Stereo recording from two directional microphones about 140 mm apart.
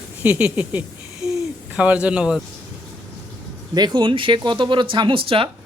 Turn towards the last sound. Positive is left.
turn(degrees=-40)  # may be behind; listen again after turning